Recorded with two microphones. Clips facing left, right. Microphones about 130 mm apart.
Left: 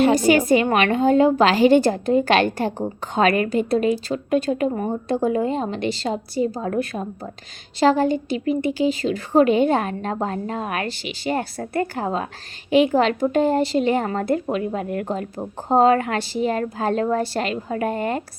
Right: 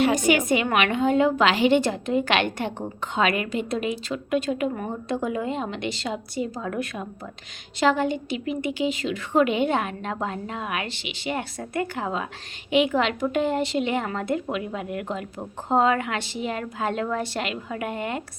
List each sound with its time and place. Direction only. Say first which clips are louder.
0.0 s a woman's voice: left 4 dB; 35° left (ahead or behind)